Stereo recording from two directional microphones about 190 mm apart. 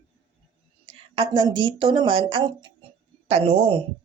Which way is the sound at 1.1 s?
25° right (ahead or behind).